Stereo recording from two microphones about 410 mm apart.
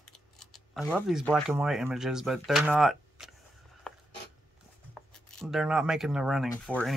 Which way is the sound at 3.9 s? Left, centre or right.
Centre.